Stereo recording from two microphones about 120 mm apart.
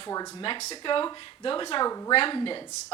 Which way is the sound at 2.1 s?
50° left (ahead or behind).